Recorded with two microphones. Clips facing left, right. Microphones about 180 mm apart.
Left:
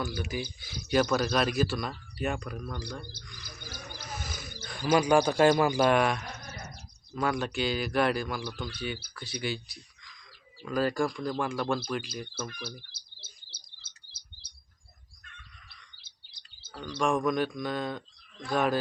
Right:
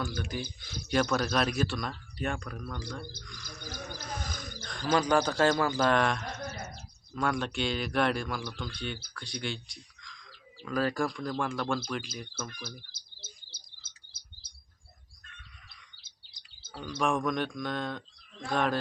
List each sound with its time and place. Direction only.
0.0 s speech: 5° left (ahead or behind)
3.6 s speech: 45° right (ahead or behind)
4.1 s speech: 5° left (ahead or behind)
16.7 s speech: 5° right (ahead or behind)